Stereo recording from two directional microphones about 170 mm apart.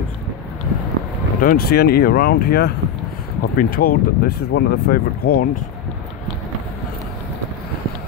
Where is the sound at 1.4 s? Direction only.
60° left (ahead or behind).